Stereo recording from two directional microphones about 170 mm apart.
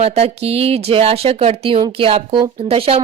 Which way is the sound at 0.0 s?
35° right (ahead or behind).